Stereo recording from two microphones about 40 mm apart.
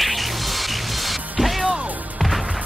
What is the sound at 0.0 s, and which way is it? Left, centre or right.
Music, centre.